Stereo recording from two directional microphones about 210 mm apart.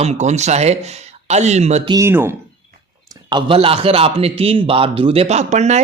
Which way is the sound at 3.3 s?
25° right (ahead or behind).